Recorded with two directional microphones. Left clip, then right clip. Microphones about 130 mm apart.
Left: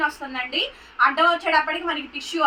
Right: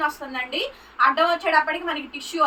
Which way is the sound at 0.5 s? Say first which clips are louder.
Left 2 dB; 10° right (ahead or behind).